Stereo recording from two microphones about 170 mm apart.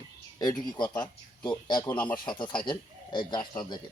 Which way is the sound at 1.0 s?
5° left (ahead or behind).